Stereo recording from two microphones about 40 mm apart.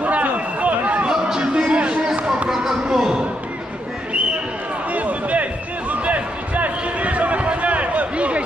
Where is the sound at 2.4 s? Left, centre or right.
Centre.